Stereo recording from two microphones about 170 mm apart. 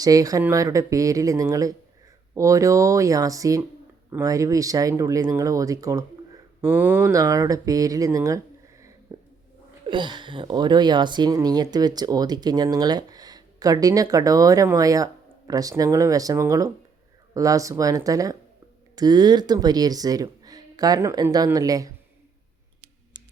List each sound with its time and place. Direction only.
0.0 s speech: 20° right (ahead or behind)
9.1 s a sound: 25° right (ahead or behind)
9.9 s speech: 25° right (ahead or behind)